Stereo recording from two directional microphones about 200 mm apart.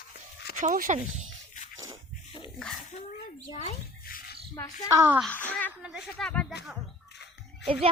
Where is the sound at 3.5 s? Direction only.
30° left (ahead or behind).